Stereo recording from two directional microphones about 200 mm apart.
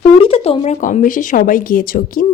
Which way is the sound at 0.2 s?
30° left (ahead or behind).